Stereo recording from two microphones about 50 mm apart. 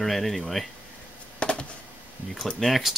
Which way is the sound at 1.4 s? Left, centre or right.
Left.